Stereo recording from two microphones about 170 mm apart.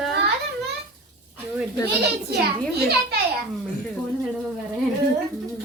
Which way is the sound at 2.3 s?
70° right (ahead or behind).